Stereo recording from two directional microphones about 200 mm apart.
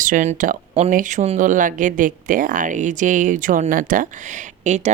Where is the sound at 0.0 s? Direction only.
40° right (ahead or behind).